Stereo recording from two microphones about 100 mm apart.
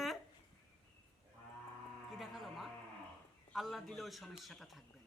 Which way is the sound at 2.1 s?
Centre (ahead or behind).